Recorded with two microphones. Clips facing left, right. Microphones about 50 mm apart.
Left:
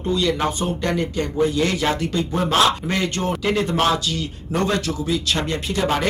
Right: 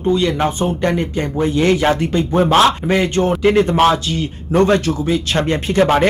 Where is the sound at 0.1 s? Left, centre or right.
Right.